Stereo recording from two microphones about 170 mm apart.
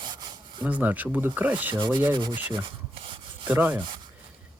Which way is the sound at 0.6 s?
10° right (ahead or behind).